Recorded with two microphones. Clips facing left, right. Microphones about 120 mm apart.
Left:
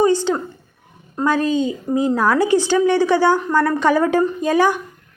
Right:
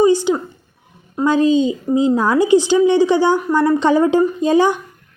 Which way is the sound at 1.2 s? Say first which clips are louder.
Right 4 dB; 20° right (ahead or behind).